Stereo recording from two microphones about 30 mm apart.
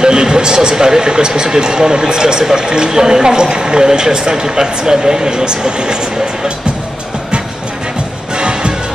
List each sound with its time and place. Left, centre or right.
0.0 s speech: right
8.4 s music: right